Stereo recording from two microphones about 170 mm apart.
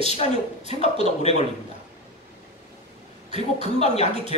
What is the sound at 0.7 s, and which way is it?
Speech, 40° left (ahead or behind).